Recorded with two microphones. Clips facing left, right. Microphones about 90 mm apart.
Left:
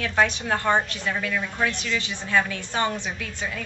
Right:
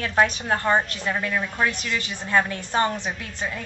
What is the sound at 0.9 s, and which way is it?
A woman's voice, 35° right (ahead or behind).